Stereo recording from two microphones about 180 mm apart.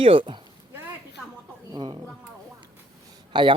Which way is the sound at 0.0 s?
30° right (ahead or behind).